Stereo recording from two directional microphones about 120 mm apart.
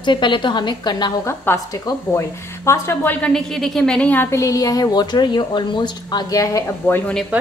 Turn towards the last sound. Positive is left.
turn(degrees=25)  # may be behind; listen again after turning